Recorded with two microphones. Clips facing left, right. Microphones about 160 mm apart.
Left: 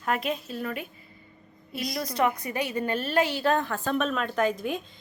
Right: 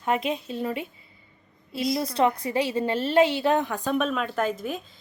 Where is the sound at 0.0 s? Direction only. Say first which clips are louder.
Right 3 dB; 25° right (ahead or behind).